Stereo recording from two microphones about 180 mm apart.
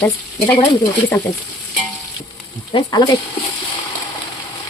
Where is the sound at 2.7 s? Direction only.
25° left (ahead or behind).